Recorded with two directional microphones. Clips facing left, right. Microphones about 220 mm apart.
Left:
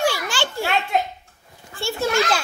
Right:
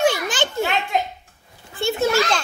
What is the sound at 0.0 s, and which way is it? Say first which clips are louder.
Children playing: right 3 dB; 20° right (ahead or behind).